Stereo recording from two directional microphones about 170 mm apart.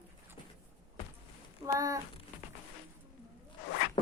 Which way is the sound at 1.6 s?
20° right (ahead or behind).